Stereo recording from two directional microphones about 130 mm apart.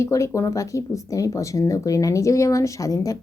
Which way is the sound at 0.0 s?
25° left (ahead or behind).